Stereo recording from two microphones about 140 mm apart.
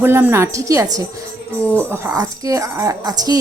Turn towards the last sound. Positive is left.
turn(degrees=-30)  # may be behind; listen again after turning